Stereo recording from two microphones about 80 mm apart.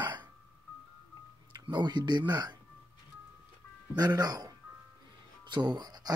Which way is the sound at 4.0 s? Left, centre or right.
Right.